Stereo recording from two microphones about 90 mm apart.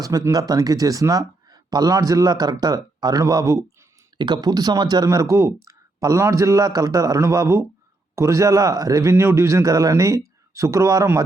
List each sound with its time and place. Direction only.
0.0 s speech: 40° right (ahead or behind)
4.2 s speech: 55° right (ahead or behind)
5.0 s a man's voice: 40° right (ahead or behind)